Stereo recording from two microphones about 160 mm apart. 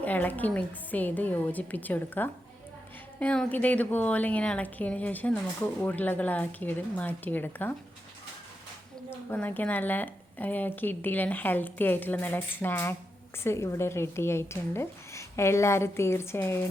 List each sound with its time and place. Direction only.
0.0 s speech: 10° left (ahead or behind)
9.3 s speech: 10° left (ahead or behind)